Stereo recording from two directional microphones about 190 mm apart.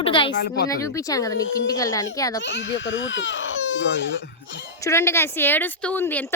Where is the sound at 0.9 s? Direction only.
15° left (ahead or behind).